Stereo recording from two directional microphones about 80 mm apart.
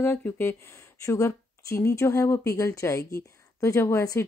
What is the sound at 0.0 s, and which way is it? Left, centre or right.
Speech, left.